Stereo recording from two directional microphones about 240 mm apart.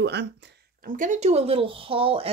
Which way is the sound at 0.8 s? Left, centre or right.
Right.